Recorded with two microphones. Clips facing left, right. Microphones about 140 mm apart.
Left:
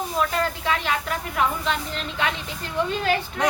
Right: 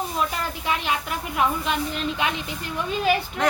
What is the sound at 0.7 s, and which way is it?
A woman's voice, 20° right (ahead or behind).